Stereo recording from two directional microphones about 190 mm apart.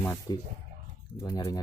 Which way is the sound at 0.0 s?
10° left (ahead or behind).